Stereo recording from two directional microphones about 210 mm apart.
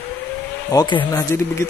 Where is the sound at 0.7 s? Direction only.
20° left (ahead or behind).